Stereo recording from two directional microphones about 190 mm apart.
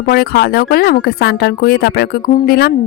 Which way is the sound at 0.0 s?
55° left (ahead or behind).